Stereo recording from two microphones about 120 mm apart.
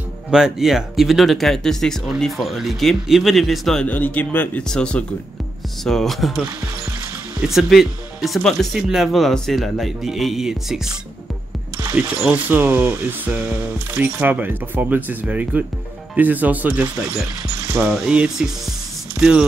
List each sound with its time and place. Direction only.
0.3 s speech: 5° right (ahead or behind)
3.8 s speech: 15° left (ahead or behind)
7.4 s speech: centre (ahead or behind)
11.9 s speech: 10° right (ahead or behind)